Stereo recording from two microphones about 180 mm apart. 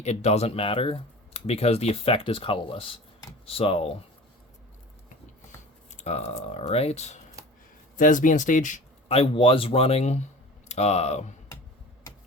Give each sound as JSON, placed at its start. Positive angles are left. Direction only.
{"t": 0.0, "sound": "speech", "side_deg": 40}
{"t": 5.9, "sound": "speech", "side_deg": 40}